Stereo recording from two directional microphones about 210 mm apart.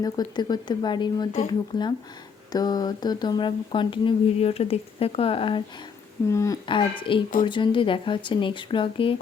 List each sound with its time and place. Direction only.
0.0 s speech: 20° left (ahead or behind)